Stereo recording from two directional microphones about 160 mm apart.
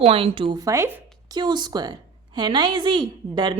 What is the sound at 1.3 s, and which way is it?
A woman's voice, 25° right (ahead or behind).